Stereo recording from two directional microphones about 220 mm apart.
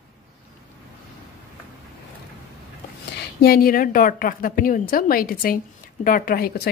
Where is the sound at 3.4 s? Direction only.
40° left (ahead or behind).